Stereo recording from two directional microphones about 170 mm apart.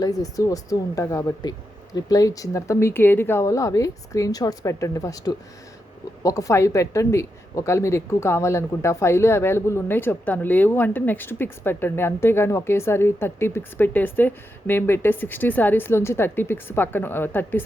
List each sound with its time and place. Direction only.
0.0 s speech: 20° left (ahead or behind)